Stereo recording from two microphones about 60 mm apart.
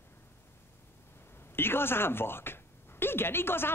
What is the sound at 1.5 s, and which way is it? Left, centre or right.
A woman's voice, left.